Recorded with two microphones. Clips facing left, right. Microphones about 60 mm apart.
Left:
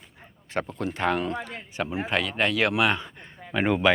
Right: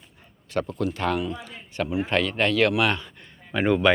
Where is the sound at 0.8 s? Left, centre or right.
Left.